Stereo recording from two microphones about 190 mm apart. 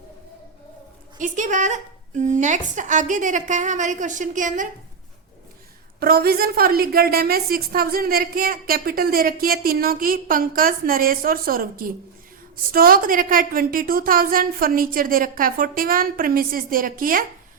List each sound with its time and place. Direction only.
1.2 s a woman's voice: 40° right (ahead or behind)
6.0 s a woman's voice: 55° right (ahead or behind)